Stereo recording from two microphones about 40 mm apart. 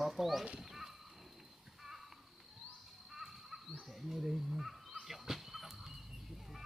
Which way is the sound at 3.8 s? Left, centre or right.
Centre.